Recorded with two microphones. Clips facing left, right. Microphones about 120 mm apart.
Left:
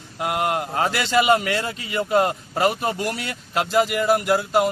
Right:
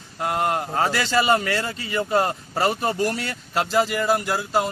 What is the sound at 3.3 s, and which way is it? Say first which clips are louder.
Speech: left 1 dB; 15° left (ahead or behind).